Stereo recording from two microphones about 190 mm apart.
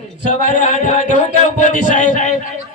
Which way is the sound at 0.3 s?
40° left (ahead or behind).